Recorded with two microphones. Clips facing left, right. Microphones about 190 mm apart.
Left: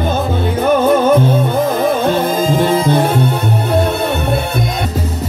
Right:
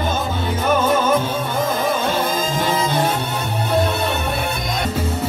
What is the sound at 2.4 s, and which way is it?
Music, 60° left (ahead or behind).